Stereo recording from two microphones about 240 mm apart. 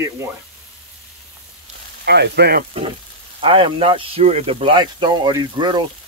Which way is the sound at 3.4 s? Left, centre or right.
Right.